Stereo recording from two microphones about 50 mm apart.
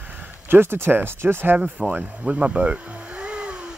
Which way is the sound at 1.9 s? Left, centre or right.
Right.